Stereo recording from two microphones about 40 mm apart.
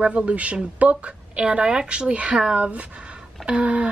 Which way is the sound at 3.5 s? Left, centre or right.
Right.